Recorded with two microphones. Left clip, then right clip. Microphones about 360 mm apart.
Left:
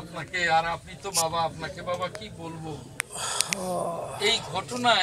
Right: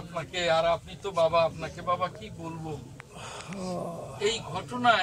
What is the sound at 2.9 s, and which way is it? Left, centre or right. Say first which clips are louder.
Speech: left 11 dB; left.